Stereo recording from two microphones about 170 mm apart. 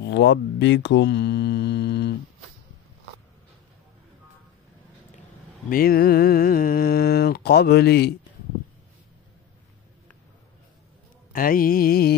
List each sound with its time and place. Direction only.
0.0 s mantra: 90° left
5.7 s speech: 60° left (ahead or behind)
11.3 s mantra: 55° left (ahead or behind)